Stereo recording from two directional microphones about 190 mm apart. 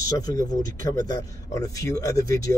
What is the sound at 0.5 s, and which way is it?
Speech, 20° left (ahead or behind).